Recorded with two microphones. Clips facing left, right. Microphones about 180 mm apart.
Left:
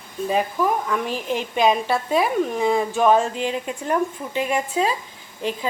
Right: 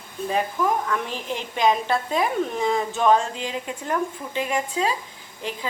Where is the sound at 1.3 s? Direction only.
15° left (ahead or behind).